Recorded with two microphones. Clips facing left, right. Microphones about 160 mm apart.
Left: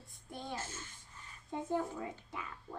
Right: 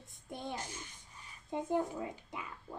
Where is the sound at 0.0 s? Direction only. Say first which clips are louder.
Right 3 dB; 20° right (ahead or behind).